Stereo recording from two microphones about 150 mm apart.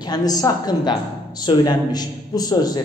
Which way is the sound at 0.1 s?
25° left (ahead or behind).